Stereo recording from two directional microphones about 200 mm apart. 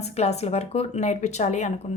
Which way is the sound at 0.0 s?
35° left (ahead or behind).